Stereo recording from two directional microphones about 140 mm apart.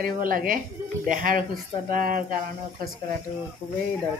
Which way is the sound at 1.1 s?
70° right (ahead or behind).